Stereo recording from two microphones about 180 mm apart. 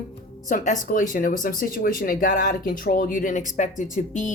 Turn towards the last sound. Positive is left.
turn(degrees=45)  # may be behind; listen again after turning